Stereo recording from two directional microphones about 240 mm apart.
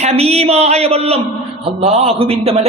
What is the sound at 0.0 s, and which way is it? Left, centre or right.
A man's voice, right.